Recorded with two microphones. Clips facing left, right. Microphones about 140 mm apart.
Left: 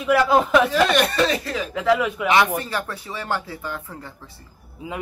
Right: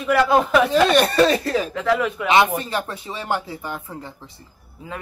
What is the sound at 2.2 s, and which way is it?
Speech, 20° right (ahead or behind).